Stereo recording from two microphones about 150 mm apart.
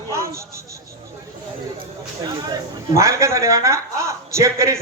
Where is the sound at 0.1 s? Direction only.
20° right (ahead or behind).